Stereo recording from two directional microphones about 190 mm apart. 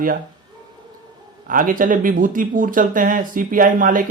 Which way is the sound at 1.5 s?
45° right (ahead or behind).